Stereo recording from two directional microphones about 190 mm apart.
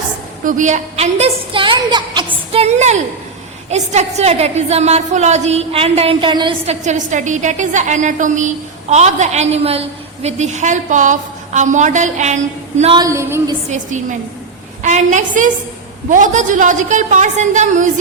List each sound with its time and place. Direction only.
0.4 s a woman's voice: 40° right (ahead or behind)
12.8 s a woman's voice: 25° right (ahead or behind)
13.1 s a woman's voice: 15° right (ahead or behind)
13.7 s a woman's voice: 40° right (ahead or behind)